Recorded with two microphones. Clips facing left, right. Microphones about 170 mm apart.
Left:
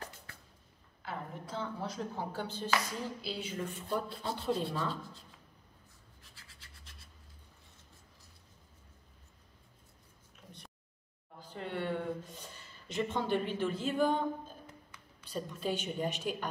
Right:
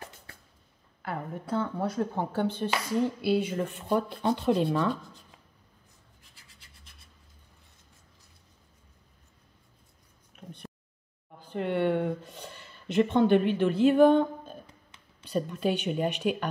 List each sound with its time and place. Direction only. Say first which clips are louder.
1.0 s a woman's voice: right 6 dB; 60° right (ahead or behind)
6.3 s scratch: even; 15° right (ahead or behind)
10.3 s a sound: right 10 dB; 60° right (ahead or behind)
11.4 s speech: right 10 dB; 65° right (ahead or behind)
14.9 s a sound: left 2 dB; 20° right (ahead or behind)
15.2 s a woman's voice: right 8 dB; 65° right (ahead or behind)